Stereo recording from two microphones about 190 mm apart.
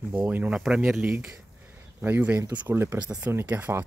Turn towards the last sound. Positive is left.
turn(degrees=-10)  # may be behind; listen again after turning